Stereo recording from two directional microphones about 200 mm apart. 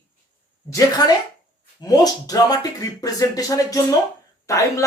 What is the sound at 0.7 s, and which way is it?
Speech, 20° left (ahead or behind).